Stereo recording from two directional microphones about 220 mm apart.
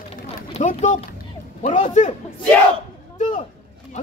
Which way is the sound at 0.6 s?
35° left (ahead or behind).